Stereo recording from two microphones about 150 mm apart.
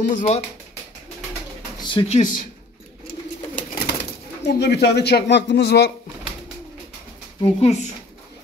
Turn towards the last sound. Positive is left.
turn(degrees=45)  # may be behind; listen again after turning